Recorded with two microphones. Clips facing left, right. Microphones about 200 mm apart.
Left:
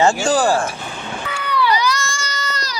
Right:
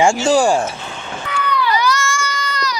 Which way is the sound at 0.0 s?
10° right (ahead or behind).